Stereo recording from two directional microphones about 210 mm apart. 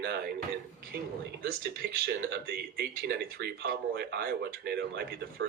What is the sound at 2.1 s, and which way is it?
Speech, 50° right (ahead or behind).